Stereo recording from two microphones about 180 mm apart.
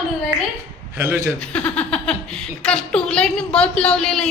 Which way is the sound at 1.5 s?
5° left (ahead or behind).